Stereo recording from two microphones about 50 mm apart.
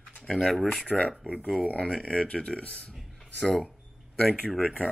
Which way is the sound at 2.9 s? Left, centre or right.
Centre.